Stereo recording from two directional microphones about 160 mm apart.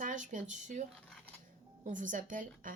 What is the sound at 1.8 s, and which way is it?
Speech, 55° right (ahead or behind).